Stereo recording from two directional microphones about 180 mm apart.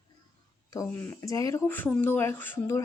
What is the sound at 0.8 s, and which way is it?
Speech, 10° left (ahead or behind).